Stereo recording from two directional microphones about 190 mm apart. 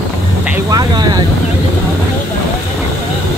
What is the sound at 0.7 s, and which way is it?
Speech, 20° right (ahead or behind).